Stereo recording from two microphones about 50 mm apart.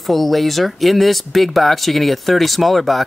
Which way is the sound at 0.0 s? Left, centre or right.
Centre.